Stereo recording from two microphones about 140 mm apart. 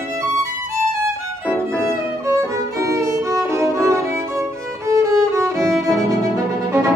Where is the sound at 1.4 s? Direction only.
5° left (ahead or behind).